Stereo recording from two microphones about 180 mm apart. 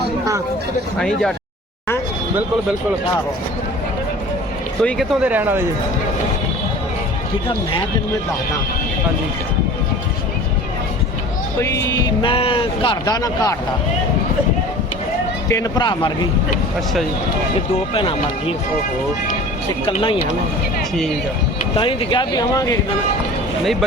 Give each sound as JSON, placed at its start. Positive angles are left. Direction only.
{"t": 0.9, "sound": "speech", "side_deg": 5}
{"t": 4.8, "sound": "speech", "side_deg": 5}
{"t": 5.2, "sound": "speech", "side_deg": -10}
{"t": 11.6, "sound": "speech", "side_deg": 15}
{"t": 15.4, "sound": "speech", "side_deg": 20}
{"t": 17.9, "sound": "speech", "side_deg": 30}
{"t": 19.8, "sound": "speech", "side_deg": 30}
{"t": 21.8, "sound": "speech", "side_deg": 25}